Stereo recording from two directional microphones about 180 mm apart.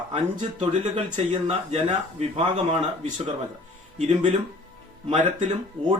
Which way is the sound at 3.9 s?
40° right (ahead or behind).